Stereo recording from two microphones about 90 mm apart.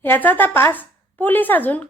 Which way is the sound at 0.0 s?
20° left (ahead or behind).